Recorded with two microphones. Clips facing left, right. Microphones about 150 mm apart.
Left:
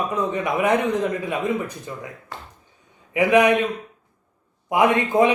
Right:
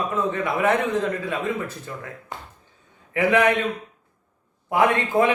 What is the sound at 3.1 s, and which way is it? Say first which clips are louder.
Speech: left 3 dB; 15° left (ahead or behind).